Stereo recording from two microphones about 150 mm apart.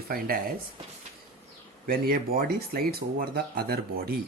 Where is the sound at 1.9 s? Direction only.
80° right.